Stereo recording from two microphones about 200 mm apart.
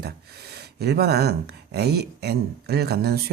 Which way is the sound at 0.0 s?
55° right (ahead or behind).